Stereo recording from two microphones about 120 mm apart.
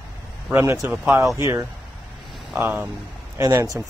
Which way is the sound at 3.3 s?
30° right (ahead or behind).